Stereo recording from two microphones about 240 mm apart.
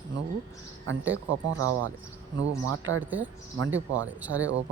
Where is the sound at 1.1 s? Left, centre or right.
Right.